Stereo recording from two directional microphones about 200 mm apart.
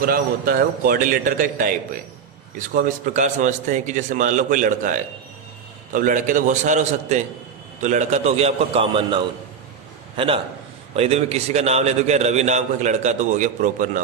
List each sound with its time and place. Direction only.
0.0 s a man's voice: 45° right (ahead or behind)
2.7 s a man's voice: 40° right (ahead or behind)